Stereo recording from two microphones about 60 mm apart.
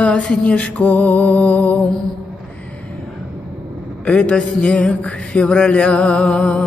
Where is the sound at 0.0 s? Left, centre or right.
Centre.